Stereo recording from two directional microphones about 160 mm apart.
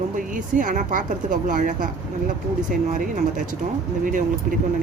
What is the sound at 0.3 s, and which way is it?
Speech, 55° right (ahead or behind).